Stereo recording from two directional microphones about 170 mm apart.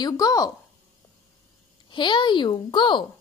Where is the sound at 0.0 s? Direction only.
20° left (ahead or behind).